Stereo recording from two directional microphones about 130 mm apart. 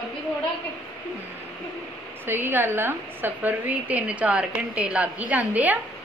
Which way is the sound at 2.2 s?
15° right (ahead or behind).